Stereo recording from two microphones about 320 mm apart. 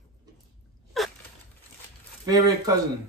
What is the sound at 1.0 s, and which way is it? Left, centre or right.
Gasp, centre.